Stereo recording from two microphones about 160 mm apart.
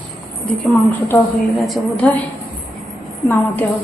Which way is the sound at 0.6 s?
10° left (ahead or behind).